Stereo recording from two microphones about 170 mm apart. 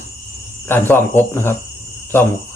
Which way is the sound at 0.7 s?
15° left (ahead or behind).